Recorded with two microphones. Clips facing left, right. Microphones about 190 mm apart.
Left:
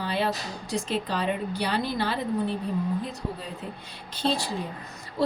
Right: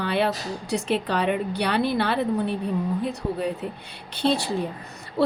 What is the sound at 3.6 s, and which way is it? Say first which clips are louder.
A woman's voice: right 5 dB; 65° right (ahead or behind).